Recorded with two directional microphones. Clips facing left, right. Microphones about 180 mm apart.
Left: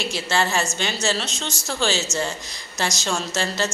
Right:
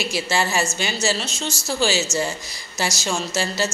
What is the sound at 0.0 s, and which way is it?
A woman's voice, 10° right (ahead or behind).